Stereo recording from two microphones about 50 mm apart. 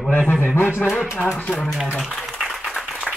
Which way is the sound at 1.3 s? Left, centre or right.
Left.